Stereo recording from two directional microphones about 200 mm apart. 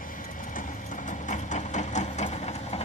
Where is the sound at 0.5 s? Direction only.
40° left (ahead or behind).